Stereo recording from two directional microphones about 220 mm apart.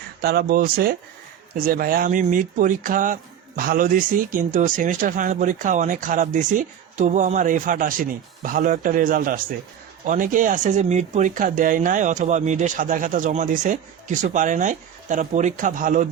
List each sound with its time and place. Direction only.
0.2 s speech: 45° right (ahead or behind)